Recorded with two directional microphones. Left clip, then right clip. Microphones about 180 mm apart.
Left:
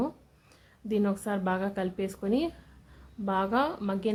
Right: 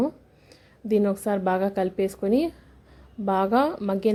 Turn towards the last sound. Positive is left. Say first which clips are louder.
# right 6 dB
turn(degrees=-20)  # may be behind; listen again after turning